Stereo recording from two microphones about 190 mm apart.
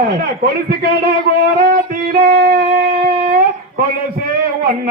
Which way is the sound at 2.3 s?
50° right (ahead or behind).